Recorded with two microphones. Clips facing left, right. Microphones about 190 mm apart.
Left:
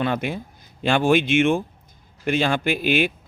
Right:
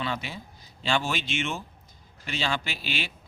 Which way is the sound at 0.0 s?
55° left (ahead or behind).